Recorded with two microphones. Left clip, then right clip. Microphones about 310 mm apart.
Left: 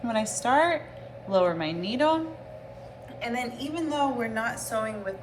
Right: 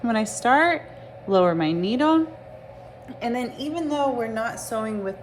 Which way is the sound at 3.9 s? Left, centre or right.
Centre.